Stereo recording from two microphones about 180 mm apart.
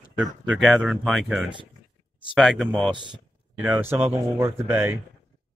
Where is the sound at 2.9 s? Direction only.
25° right (ahead or behind).